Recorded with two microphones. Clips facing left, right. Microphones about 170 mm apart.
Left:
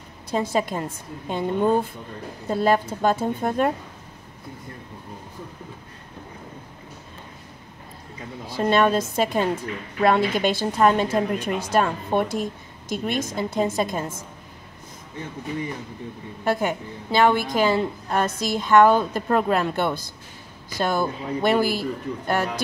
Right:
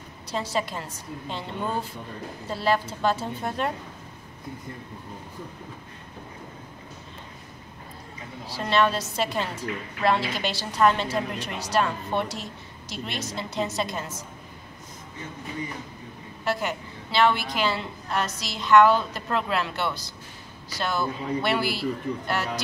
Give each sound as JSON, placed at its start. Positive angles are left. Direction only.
{"t": 0.3, "sound": "a woman's voice", "side_deg": 50}
{"t": 8.5, "sound": "a woman's voice", "side_deg": 50}
{"t": 16.4, "sound": "a woman's voice", "side_deg": 50}